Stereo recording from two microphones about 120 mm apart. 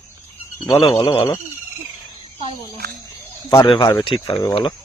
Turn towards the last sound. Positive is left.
turn(degrees=50)  # may be behind; listen again after turning